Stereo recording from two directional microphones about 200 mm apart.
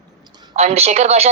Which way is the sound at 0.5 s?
30° right (ahead or behind).